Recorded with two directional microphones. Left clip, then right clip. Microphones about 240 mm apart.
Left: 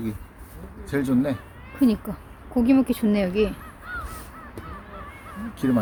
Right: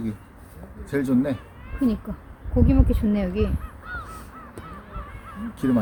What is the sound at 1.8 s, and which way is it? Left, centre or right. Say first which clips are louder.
Speech: left 3 dB; left.